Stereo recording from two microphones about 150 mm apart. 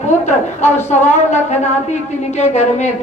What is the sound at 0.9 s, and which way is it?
A man's voice, 50° left (ahead or behind).